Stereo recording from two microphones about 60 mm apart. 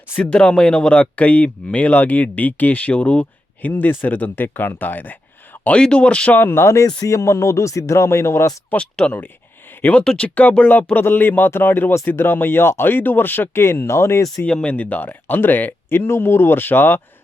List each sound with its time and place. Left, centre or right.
0.2 s speech: centre
5.8 s speech: centre
6.4 s speech: left
6.8 s speech: left
7.2 s speech: left
8.7 s speech: centre
10.2 s speech: left
13.5 s speech: left
14.4 s speech: centre; by 17.0 s left